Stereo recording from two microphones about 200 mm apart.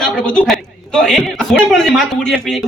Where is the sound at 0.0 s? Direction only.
Centre (ahead or behind).